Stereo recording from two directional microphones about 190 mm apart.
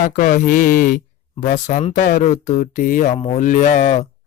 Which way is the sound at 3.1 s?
30° left (ahead or behind).